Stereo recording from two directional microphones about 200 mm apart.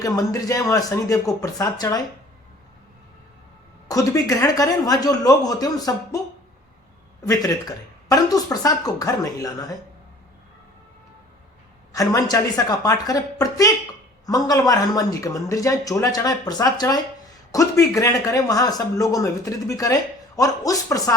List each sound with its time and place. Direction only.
0.0 s speech: 15° left (ahead or behind)
3.8 s speech: 15° left (ahead or behind)
8.1 s speech: 20° left (ahead or behind)
11.9 s speech: 15° left (ahead or behind)